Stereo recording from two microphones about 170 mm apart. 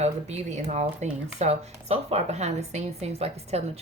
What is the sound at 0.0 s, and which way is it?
Speech, 40° right (ahead or behind).